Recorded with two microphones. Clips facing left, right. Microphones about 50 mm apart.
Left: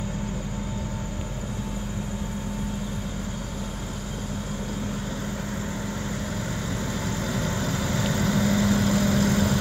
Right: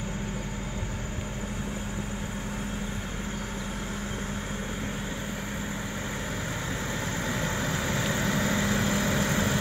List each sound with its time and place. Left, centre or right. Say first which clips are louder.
7.3 s vehicle: left 2 dB; right